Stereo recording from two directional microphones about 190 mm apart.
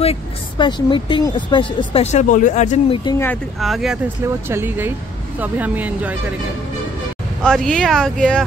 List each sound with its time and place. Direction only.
0.0 s a woman's voice: 30° left (ahead or behind)
3.1 s speech: 15° left (ahead or behind)
3.5 s speech: centre (ahead or behind)
4.3 s speech: 10° right (ahead or behind)
7.4 s speech: centre (ahead or behind)